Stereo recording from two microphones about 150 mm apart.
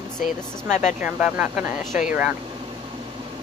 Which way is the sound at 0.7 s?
55° left (ahead or behind).